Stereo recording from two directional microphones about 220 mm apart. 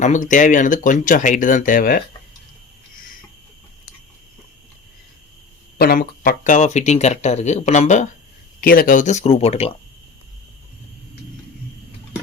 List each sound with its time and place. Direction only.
0.0 s speech: 35° left (ahead or behind)
5.7 s speech: 45° left (ahead or behind); by 9.7 s 25° left (ahead or behind)